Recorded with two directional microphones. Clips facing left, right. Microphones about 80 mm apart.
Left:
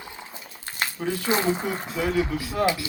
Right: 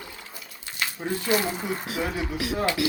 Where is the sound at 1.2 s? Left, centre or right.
Left.